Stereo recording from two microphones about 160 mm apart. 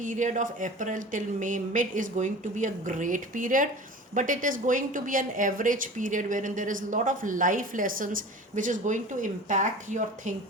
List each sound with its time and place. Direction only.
0.0 s speech: 50° right (ahead or behind)